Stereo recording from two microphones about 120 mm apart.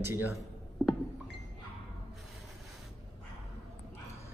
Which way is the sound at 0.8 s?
15° left (ahead or behind).